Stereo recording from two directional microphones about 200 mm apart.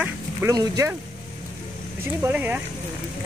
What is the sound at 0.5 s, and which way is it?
Speech, 15° right (ahead or behind).